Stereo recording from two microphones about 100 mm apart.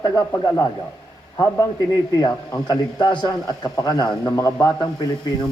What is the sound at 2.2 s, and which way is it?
Speech, 40° left (ahead or behind).